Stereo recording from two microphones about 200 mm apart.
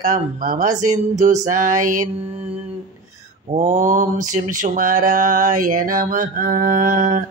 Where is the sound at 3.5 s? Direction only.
35° right (ahead or behind).